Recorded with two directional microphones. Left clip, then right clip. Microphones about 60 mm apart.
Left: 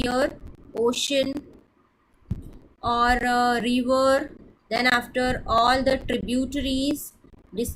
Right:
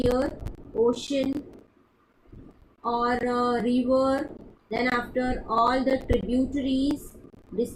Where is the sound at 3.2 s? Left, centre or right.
Left.